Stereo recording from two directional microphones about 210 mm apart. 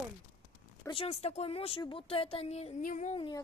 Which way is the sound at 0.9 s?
30° left (ahead or behind).